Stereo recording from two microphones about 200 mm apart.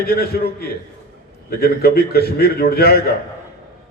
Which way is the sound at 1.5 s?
50° left (ahead or behind).